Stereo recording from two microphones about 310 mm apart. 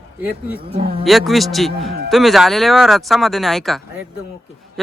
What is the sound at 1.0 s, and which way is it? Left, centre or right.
A man's voice, centre.